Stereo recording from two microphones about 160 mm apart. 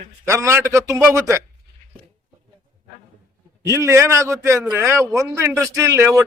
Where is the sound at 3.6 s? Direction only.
20° right (ahead or behind).